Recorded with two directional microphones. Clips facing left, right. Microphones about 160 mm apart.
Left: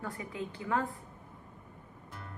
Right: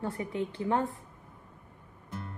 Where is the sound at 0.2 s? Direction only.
25° right (ahead or behind).